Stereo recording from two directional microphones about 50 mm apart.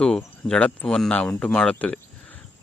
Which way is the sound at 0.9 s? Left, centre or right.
Centre.